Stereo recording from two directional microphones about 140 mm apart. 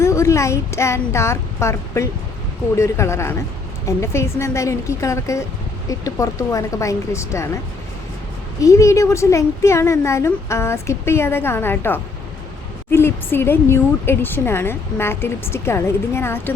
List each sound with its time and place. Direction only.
0.0 s a woman's voice: 20° left (ahead or behind)
8.6 s a woman's voice: 20° left (ahead or behind)